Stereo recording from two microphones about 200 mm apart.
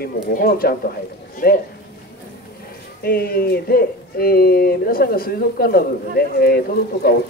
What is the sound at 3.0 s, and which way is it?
Speech, 50° left (ahead or behind).